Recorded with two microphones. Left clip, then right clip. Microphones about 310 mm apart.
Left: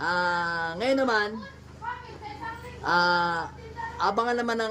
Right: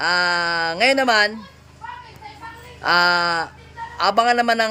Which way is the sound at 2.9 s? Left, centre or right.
Centre.